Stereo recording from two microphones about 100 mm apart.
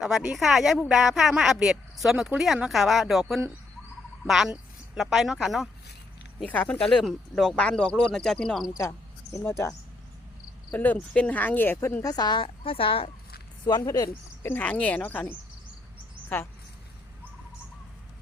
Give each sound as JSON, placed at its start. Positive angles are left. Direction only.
{"t": 0.0, "sound": "speech", "side_deg": -10}
{"t": 6.4, "sound": "speech", "side_deg": 15}
{"t": 8.8, "sound": "speech", "side_deg": 25}
{"t": 12.0, "sound": "speech", "side_deg": 45}
{"t": 12.6, "sound": "speech", "side_deg": 65}
{"t": 13.7, "sound": "speech", "side_deg": 45}
{"t": 14.4, "sound": "speech", "side_deg": 20}